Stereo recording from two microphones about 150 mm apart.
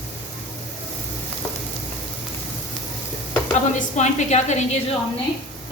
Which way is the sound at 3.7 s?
55° left (ahead or behind).